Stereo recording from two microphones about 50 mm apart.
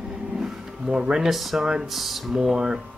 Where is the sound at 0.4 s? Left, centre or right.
Centre.